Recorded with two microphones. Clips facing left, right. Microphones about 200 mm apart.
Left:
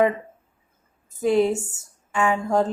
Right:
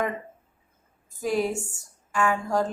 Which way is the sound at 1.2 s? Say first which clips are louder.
Left 6 dB; 25° left (ahead or behind).